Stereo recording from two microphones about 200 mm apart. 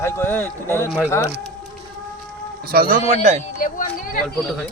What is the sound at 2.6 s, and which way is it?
Speech, 45° right (ahead or behind).